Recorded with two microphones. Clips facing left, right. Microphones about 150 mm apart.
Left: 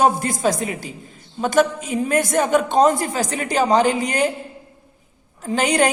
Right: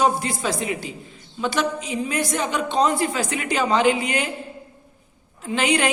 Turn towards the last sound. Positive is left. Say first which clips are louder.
# left 3 dB
turn(degrees=40)  # may be behind; listen again after turning